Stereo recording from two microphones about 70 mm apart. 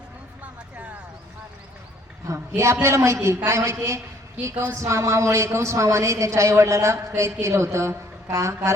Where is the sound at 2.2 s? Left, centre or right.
Right.